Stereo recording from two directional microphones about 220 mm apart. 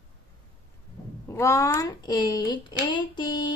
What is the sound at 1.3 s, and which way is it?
A woman's voice, 15° left (ahead or behind).